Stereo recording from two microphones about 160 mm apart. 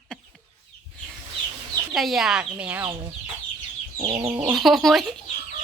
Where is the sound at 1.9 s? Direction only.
Centre (ahead or behind).